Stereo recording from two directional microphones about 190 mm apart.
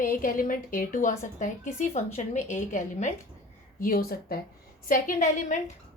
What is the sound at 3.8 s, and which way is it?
A woman's voice, 50° left (ahead or behind).